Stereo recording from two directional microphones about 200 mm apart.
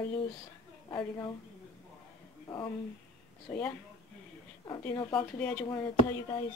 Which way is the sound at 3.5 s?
10° left (ahead or behind).